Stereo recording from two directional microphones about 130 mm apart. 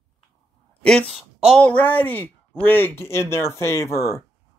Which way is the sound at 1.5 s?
10° left (ahead or behind).